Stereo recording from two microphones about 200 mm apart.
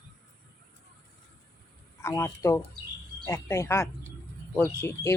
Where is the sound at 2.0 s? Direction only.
15° left (ahead or behind).